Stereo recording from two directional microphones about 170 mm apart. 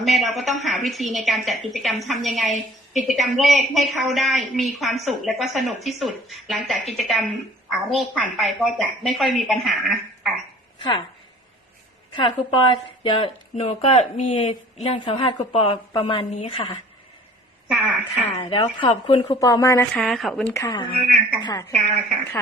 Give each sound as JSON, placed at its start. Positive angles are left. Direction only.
{"t": 0.0, "sound": "a woman's voice", "side_deg": 0}
{"t": 12.1, "sound": "a woman's voice", "side_deg": 30}
{"t": 17.7, "sound": "speech", "side_deg": -5}
{"t": 18.3, "sound": "a woman's voice", "side_deg": 35}
{"t": 19.4, "sound": "a woman's voice", "side_deg": 20}
{"t": 20.5, "sound": "speech", "side_deg": 20}